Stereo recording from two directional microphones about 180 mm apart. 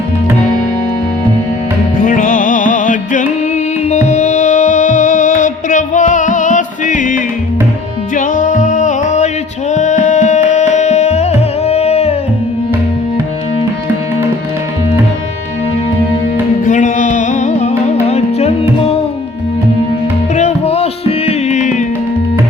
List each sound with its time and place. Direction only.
2.0 s music: 50° left (ahead or behind)
16.6 s music: 45° left (ahead or behind)
20.3 s music: 40° left (ahead or behind)